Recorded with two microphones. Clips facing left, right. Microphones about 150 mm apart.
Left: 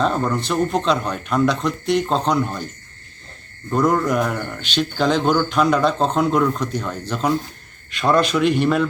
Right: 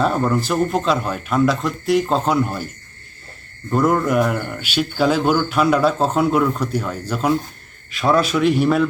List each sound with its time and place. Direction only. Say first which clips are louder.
0.0 s speech: right 2 dB; 5° right (ahead or behind)
3.7 s speech: right 1 dB; 5° right (ahead or behind)